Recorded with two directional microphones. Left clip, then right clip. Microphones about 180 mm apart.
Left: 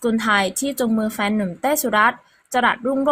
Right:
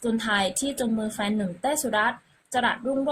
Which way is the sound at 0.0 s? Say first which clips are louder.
Left 6 dB; 30° left (ahead or behind).